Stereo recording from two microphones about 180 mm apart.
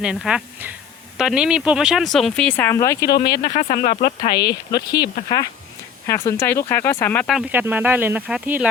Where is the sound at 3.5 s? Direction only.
45° left (ahead or behind).